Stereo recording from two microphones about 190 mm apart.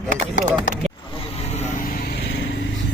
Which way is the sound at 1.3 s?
35° left (ahead or behind).